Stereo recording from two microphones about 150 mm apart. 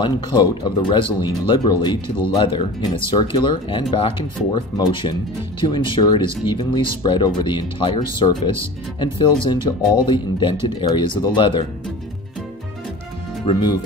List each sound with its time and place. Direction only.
0.0 s speech: 30° left (ahead or behind)
13.5 s speech: 30° left (ahead or behind)